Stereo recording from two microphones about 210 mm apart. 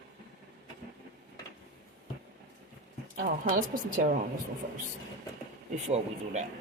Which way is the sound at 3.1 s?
40° right (ahead or behind).